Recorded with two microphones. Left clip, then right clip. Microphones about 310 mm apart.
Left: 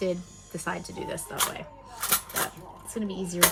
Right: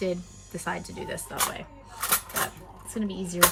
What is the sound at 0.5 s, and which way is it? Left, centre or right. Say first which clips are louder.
Speech: even; centre.